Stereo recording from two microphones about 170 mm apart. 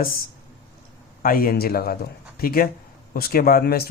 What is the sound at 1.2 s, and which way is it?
Speech, 60° left (ahead or behind).